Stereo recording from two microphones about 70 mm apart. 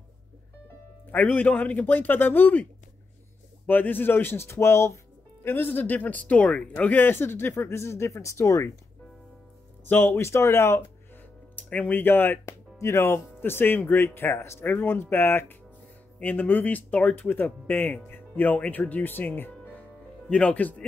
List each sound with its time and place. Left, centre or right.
1.1 s speech: left
3.6 s speech: left
5.4 s speech: left
6.8 s speech: left
9.8 s speech: left
11.7 s speech: left
20.2 s speech: centre